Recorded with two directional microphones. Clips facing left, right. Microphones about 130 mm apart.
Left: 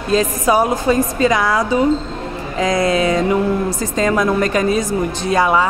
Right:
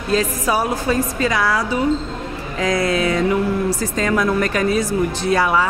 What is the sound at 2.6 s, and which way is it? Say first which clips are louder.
Speech: left 3 dB; 20° left (ahead or behind).